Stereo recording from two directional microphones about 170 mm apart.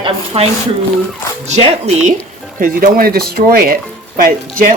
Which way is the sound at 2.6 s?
55° right (ahead or behind).